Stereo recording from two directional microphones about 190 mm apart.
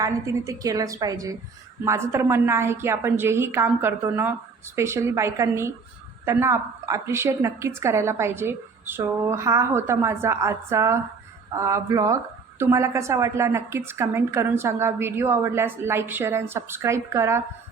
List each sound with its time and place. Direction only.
0.0 s speech: 15° right (ahead or behind)